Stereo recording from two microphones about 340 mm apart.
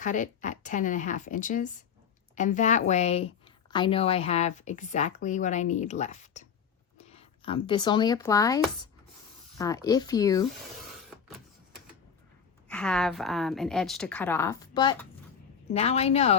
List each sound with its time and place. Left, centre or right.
0.0 s a woman's voice: left
11.1 s a sound: centre
12.6 s a woman's voice: centre